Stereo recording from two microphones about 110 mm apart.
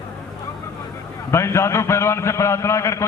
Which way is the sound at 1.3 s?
25° left (ahead or behind).